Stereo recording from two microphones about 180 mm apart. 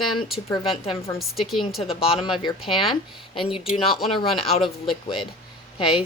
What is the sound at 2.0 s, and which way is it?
Speech, 30° left (ahead or behind).